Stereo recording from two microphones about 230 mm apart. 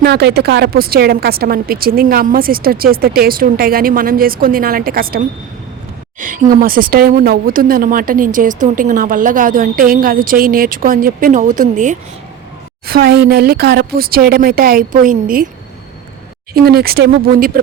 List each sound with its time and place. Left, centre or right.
0.0 s a woman's voice: right
16.6 s a woman's voice: right